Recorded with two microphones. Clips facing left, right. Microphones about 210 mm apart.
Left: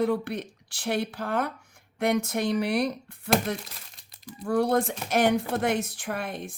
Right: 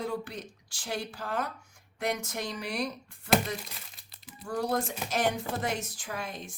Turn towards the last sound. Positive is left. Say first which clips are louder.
# left 6 dB
turn(degrees=60)  # may be behind; listen again after turning